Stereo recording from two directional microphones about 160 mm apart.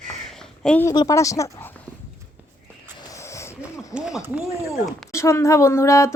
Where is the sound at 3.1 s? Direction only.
20° left (ahead or behind).